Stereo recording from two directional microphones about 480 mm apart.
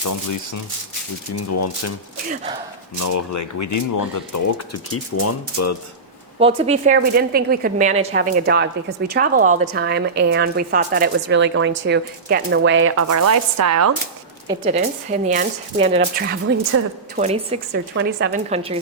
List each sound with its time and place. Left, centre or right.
1.4 s speech: left
2.3 s speech: centre
3.0 s speech: left
6.4 s speech: centre; by 13.9 s right
14.4 s speech: centre